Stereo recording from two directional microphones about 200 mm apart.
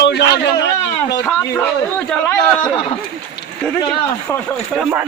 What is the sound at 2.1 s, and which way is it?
Speech, 5° left (ahead or behind).